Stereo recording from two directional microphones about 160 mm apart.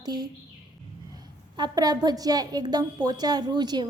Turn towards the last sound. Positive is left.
turn(degrees=-25)  # may be behind; listen again after turning